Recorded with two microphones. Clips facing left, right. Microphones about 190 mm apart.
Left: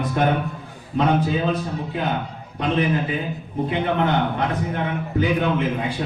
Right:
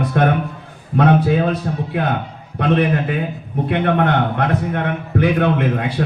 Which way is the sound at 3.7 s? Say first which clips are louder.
Right 5 dB; 60° right (ahead or behind).